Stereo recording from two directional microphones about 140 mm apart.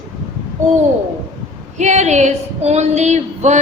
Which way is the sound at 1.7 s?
55° right (ahead or behind).